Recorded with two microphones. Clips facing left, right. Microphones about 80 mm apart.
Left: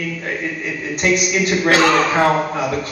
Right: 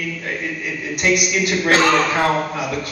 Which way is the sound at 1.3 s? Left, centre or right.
Centre.